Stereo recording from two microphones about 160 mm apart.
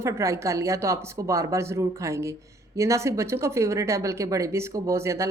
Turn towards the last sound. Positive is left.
turn(degrees=-15)  # may be behind; listen again after turning